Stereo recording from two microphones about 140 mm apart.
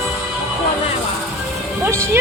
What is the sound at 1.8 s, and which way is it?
Music, 20° right (ahead or behind).